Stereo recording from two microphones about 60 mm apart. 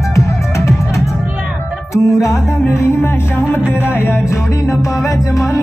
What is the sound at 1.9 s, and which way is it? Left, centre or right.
Music, left.